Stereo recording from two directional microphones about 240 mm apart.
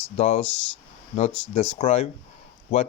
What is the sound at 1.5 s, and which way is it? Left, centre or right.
Speech, left.